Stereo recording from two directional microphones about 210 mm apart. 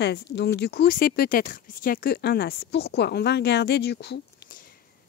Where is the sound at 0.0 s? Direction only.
50° left (ahead or behind).